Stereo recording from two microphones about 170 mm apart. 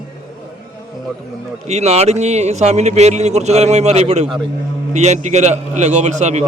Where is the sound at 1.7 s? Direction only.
40° right (ahead or behind).